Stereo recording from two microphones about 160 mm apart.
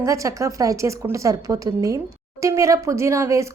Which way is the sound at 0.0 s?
20° right (ahead or behind).